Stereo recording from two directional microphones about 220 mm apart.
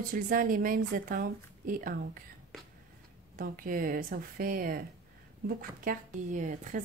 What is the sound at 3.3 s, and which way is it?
Speech, 40° right (ahead or behind).